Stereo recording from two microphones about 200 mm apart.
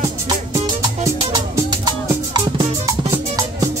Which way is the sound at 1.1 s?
20° right (ahead or behind).